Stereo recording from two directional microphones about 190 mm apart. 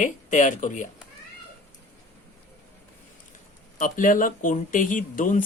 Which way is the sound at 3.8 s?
45° left (ahead or behind).